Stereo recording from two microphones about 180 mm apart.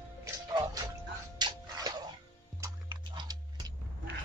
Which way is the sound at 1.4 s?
20° right (ahead or behind).